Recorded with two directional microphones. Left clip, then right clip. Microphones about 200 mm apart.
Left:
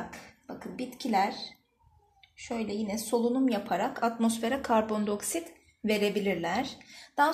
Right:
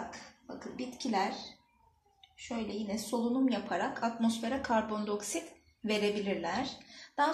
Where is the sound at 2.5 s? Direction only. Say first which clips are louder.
Left 4 dB; 50° left (ahead or behind).